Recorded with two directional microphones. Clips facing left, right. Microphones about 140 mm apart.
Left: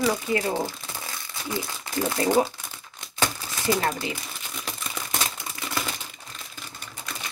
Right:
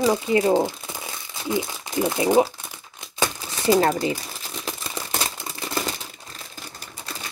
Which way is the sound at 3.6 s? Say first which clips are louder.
Right 7 dB; 30° right (ahead or behind).